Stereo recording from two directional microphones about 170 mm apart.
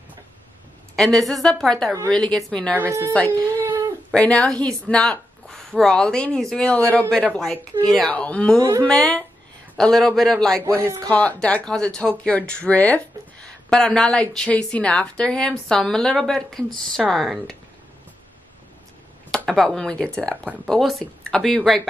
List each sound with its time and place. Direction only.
0.9 s speech: centre (ahead or behind)
2.8 s speech: 15° right (ahead or behind)
3.1 s speech: 5° left (ahead or behind)
3.6 s a sound: 15° right (ahead or behind)
4.1 s a woman's voice: 5° left (ahead or behind)
8.5 s speech: 20° right (ahead or behind)
8.8 s speech: 5° left (ahead or behind)
19.3 s speech: 5° left (ahead or behind)